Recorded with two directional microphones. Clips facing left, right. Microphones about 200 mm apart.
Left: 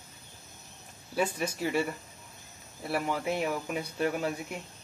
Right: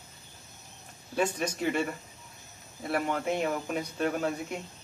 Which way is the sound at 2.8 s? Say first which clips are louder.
Right 1 dB; 5° left (ahead or behind).